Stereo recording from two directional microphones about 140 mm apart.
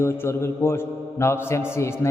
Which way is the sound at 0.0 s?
20° left (ahead or behind).